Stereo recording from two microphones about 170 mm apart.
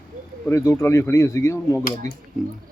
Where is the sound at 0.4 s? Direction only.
15° left (ahead or behind).